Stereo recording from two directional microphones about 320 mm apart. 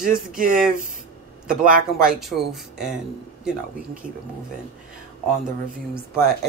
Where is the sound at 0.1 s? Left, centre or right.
Right.